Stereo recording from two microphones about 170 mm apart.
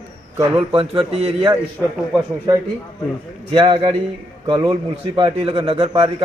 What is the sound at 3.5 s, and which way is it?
A man's voice, 25° right (ahead or behind).